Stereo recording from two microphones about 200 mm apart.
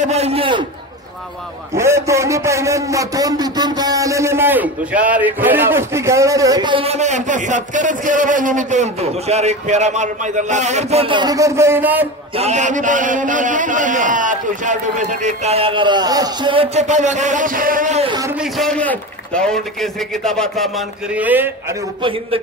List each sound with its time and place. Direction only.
0.0 s a man's voice: 30° right (ahead or behind)
1.8 s a man's voice: 15° right (ahead or behind)
12.4 s a man's voice: 35° right (ahead or behind)
18.0 s a man's voice: 20° right (ahead or behind)
18.3 s a man's voice: centre (ahead or behind)
22.0 s a man's voice: 25° right (ahead or behind)